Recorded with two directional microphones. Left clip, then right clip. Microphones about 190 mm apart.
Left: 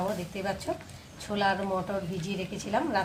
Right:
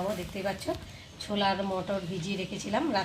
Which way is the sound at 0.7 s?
20° right (ahead or behind).